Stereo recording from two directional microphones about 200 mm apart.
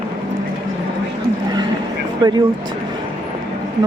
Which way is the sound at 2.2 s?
20° right (ahead or behind).